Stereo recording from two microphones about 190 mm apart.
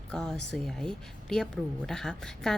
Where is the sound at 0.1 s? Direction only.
5° left (ahead or behind).